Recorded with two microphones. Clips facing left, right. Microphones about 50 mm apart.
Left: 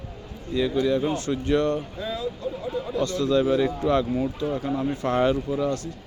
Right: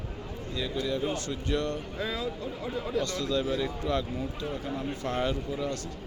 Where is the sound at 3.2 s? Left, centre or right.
Left.